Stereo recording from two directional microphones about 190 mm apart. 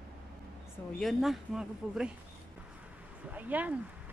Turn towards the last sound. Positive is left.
turn(degrees=-10)  # may be behind; listen again after turning